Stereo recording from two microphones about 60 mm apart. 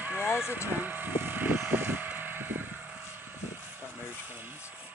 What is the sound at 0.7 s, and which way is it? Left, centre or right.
Vehicle, right.